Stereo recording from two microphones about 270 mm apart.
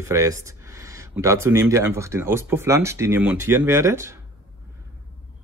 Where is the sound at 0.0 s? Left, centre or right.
Centre.